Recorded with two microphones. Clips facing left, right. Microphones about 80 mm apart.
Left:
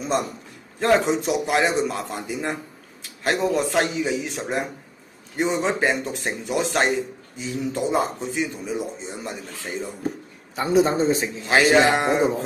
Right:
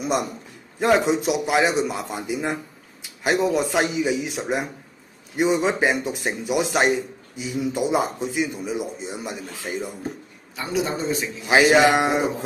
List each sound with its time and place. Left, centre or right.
0.0 s a man's voice: centre
10.5 s a man's voice: left
11.4 s speech: centre